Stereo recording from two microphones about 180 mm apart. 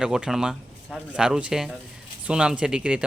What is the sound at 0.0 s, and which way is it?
Speech, 5° right (ahead or behind).